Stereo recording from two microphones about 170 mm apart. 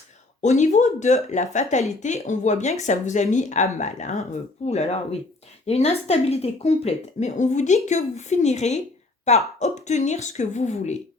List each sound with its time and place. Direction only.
0.4 s speech: 45° left (ahead or behind)